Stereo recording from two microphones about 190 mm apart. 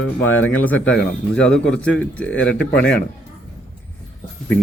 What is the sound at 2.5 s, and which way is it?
Speech, 65° left (ahead or behind).